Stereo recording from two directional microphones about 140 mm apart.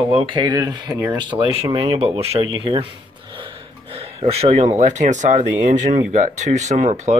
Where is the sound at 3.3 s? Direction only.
40° right (ahead or behind).